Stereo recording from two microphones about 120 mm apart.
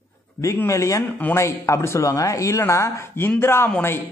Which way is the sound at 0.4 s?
25° left (ahead or behind).